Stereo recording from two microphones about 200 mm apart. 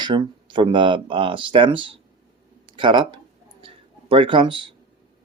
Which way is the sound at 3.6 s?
25° right (ahead or behind).